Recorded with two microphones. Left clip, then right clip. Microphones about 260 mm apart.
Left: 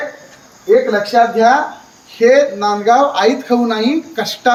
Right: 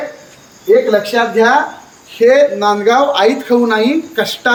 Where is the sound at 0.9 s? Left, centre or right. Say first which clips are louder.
Left 1 dB; centre.